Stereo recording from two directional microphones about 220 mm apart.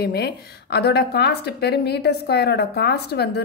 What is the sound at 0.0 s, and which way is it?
A woman's voice, 45° left (ahead or behind).